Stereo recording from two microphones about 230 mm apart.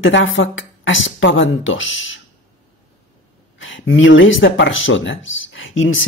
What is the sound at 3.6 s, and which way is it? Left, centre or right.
Speech, left.